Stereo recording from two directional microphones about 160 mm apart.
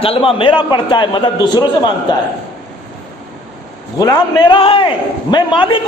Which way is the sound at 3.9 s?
25° left (ahead or behind).